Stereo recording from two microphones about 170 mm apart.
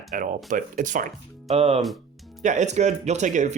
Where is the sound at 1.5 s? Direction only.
35° right (ahead or behind).